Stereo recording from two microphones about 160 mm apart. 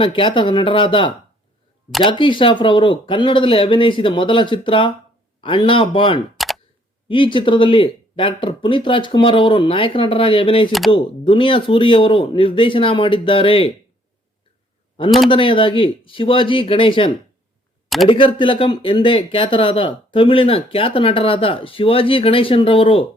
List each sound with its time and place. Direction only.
0.0 s speech: 30° left (ahead or behind)
6.3 s camera: centre (ahead or behind)
7.1 s speech: 30° left (ahead or behind)
10.7 s speech: centre (ahead or behind)
10.9 s speech: 30° left (ahead or behind)
15.3 s speech: 30° left (ahead or behind)
17.8 s a sound: centre (ahead or behind)
18.1 s speech: 30° left (ahead or behind)